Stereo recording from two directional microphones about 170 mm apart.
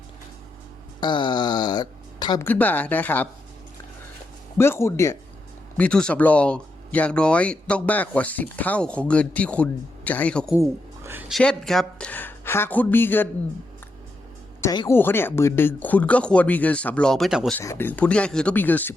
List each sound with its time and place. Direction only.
1.0 s speech: 25° left (ahead or behind)
2.5 s speech: 10° left (ahead or behind)
4.5 s speech: 15° left (ahead or behind)
10.5 s speech: 15° right (ahead or behind)
11.3 s speech: centre (ahead or behind)
14.6 s speech: 20° left (ahead or behind); by 17.6 s centre (ahead or behind)
17.6 s speech: 15° left (ahead or behind)